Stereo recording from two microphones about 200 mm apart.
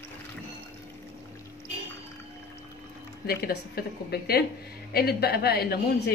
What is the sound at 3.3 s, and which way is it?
A woman's voice, 50° left (ahead or behind).